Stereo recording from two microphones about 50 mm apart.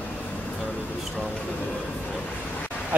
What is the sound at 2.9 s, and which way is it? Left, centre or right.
Speech, right.